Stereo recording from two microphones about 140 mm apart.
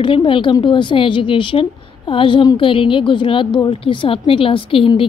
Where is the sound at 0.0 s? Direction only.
35° left (ahead or behind).